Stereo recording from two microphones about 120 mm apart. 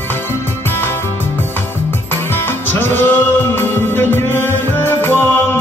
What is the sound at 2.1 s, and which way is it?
Music, 20° left (ahead or behind).